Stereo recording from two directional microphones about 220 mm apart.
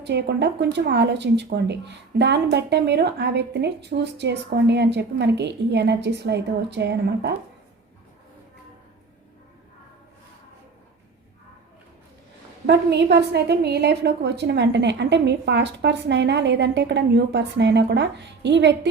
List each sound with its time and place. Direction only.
0.0 s speech: 50° right (ahead or behind)
12.6 s speech: 50° right (ahead or behind)